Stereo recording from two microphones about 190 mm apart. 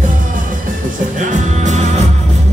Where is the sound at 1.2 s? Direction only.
40° right (ahead or behind).